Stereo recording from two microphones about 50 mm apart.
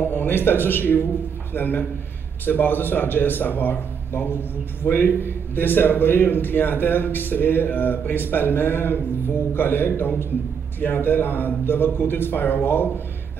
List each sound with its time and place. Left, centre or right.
0.0 s a man's voice: left